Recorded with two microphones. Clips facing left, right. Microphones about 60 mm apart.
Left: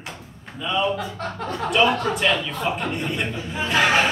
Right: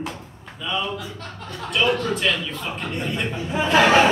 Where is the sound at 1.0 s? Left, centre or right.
Left.